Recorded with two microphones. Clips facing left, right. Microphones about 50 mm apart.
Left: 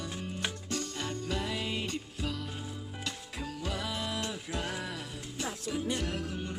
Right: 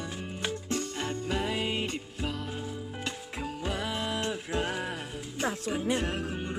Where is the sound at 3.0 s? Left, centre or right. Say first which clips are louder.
Right 2 dB; right.